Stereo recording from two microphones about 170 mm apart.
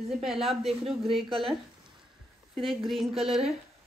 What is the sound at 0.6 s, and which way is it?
Speech, 35° right (ahead or behind).